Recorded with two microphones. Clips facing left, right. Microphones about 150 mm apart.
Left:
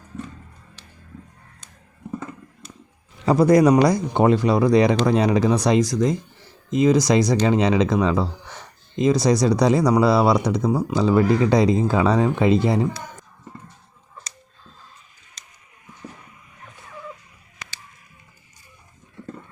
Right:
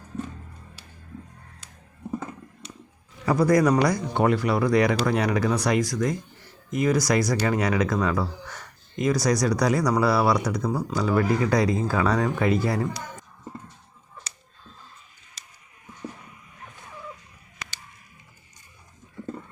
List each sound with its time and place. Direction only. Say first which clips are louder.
3.2 s speech: left 5 dB; 25° left (ahead or behind)